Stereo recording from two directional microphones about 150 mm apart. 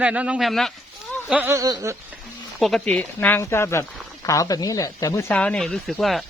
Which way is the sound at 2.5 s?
Centre (ahead or behind).